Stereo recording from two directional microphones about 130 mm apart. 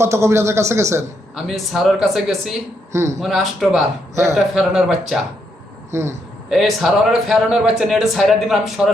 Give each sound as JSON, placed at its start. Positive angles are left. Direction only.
{"t": 0.0, "sound": "speech", "side_deg": -20}
{"t": 1.5, "sound": "speech", "side_deg": 0}
{"t": 2.9, "sound": "speech", "side_deg": -20}
{"t": 3.2, "sound": "speech", "side_deg": 0}
{"t": 5.9, "sound": "speech", "side_deg": -20}
{"t": 6.5, "sound": "speech", "side_deg": 0}